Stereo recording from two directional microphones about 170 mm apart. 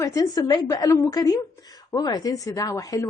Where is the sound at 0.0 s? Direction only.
20° left (ahead or behind).